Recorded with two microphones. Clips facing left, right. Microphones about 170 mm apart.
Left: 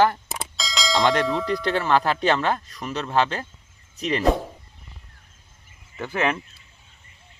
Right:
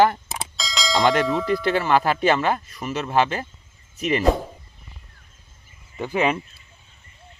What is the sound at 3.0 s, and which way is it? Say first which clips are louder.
Speech: right 2 dB; 10° right (ahead or behind).